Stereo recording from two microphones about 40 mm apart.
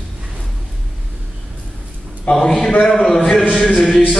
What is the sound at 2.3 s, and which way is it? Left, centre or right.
Speech, left.